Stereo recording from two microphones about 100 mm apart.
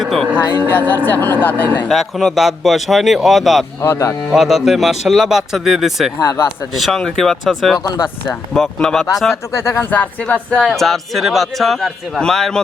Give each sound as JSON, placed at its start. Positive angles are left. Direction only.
{"t": 0.0, "sound": "music", "side_deg": 0}
{"t": 0.7, "sound": "speech", "side_deg": 20}
{"t": 1.9, "sound": "speech", "side_deg": 0}
{"t": 3.8, "sound": "speech", "side_deg": 30}
{"t": 4.3, "sound": "speech", "side_deg": -5}
{"t": 6.1, "sound": "speech", "side_deg": 30}
{"t": 6.7, "sound": "speech", "side_deg": 0}
{"t": 9.3, "sound": "speech", "side_deg": 25}
{"t": 9.9, "sound": "speech", "side_deg": 15}